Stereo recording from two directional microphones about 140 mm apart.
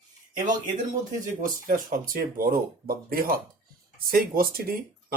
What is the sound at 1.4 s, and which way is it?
Speech, 75° right (ahead or behind).